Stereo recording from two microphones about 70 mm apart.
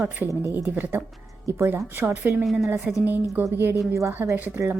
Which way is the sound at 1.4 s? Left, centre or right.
Right.